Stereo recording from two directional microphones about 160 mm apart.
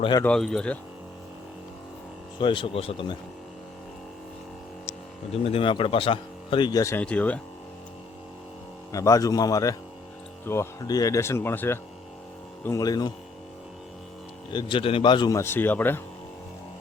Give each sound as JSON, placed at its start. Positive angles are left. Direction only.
{"t": 0.3, "sound": "speech", "side_deg": 5}
{"t": 2.4, "sound": "speech", "side_deg": 30}
{"t": 4.9, "sound": "speech", "side_deg": 40}
{"t": 7.0, "sound": "speech", "side_deg": 10}
{"t": 8.9, "sound": "speech", "side_deg": 20}
{"t": 14.5, "sound": "speech", "side_deg": 30}
{"t": 15.4, "sound": "speech", "side_deg": 15}